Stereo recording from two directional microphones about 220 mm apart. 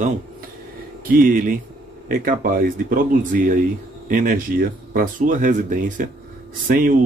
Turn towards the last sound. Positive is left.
turn(degrees=-40)  # may be behind; listen again after turning